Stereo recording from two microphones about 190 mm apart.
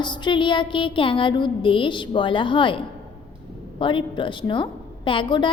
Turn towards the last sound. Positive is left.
turn(degrees=25)  # may be behind; listen again after turning